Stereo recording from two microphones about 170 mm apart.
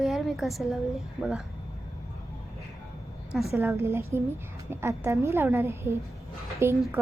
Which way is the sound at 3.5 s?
15° right (ahead or behind).